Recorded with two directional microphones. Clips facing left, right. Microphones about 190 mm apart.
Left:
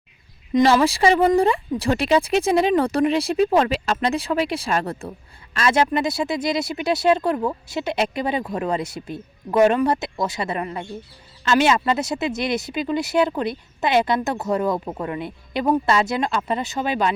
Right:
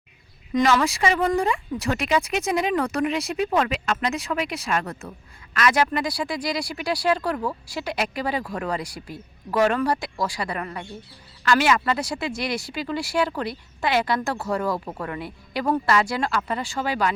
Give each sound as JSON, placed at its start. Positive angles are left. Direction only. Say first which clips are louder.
{"t": 0.5, "sound": "speech", "louder": "left 4 dB", "side_deg": 30}